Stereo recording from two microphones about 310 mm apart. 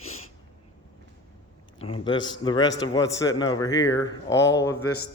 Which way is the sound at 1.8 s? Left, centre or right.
Centre.